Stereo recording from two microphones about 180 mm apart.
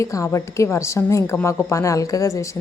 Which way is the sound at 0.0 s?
15° left (ahead or behind).